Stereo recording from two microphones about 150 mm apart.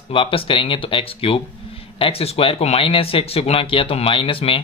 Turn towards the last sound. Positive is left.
turn(degrees=35)  # may be behind; listen again after turning